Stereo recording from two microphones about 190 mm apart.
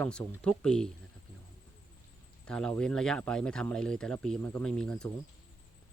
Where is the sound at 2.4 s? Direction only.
5° left (ahead or behind).